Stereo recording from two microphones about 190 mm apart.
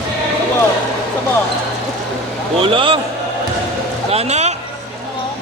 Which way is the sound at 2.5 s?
30° right (ahead or behind).